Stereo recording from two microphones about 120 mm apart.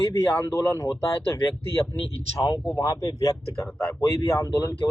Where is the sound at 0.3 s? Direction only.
25° left (ahead or behind).